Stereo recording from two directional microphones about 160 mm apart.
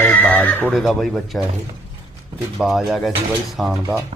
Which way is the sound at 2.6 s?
Centre (ahead or behind).